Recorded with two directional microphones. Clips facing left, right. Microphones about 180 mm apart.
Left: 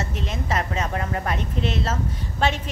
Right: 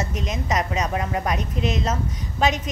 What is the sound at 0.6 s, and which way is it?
Speech, 15° right (ahead or behind).